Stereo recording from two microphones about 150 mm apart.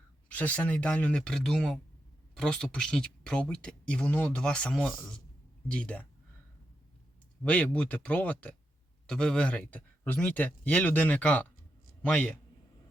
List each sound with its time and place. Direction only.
0.3 s speech: 10° left (ahead or behind)
7.4 s speech: 10° left (ahead or behind)